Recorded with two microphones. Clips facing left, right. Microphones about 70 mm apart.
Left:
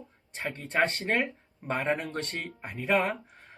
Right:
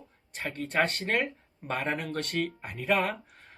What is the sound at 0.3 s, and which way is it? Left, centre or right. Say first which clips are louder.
Speech: left 1 dB; centre.